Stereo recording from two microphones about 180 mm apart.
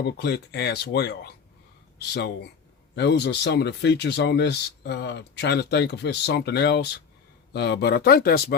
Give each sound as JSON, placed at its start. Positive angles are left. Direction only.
{"t": 0.0, "sound": "speech", "side_deg": 65}